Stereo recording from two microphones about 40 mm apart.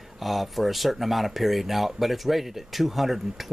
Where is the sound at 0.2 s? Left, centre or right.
Centre.